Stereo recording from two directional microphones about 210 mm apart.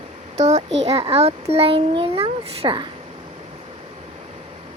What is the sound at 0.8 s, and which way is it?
A child's voice, 30° right (ahead or behind).